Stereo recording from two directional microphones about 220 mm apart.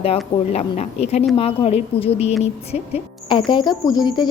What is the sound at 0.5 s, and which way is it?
A woman's voice, 30° left (ahead or behind).